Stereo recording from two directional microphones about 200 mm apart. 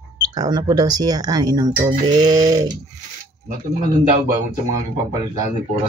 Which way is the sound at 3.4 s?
45° right (ahead or behind).